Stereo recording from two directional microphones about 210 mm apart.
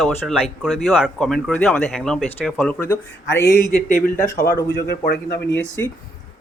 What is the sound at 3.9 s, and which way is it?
Speech, 40° left (ahead or behind).